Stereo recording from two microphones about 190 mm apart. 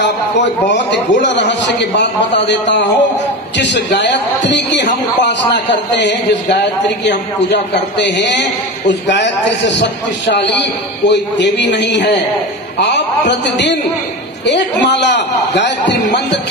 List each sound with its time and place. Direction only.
1.2 s a man's voice: 65° left (ahead or behind)
13.3 s a man's voice: 65° left (ahead or behind)